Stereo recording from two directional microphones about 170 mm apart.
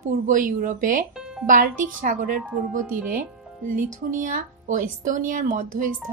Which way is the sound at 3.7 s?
50° right (ahead or behind).